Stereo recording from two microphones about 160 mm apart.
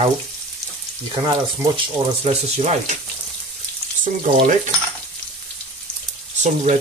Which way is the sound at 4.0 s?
55° right (ahead or behind).